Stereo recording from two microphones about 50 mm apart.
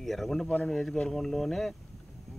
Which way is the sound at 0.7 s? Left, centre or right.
Centre.